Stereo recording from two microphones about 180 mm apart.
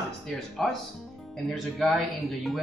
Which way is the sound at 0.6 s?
5° left (ahead or behind).